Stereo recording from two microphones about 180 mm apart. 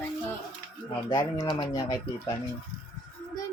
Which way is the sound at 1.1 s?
25° left (ahead or behind).